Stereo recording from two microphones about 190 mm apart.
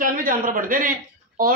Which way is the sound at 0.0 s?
45° right (ahead or behind).